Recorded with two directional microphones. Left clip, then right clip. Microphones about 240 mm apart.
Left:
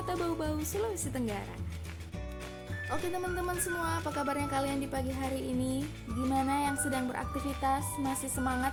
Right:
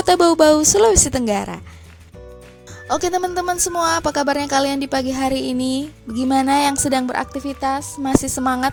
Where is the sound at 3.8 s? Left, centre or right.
Right.